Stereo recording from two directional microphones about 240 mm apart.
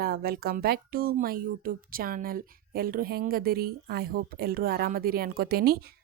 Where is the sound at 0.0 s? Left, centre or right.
Right.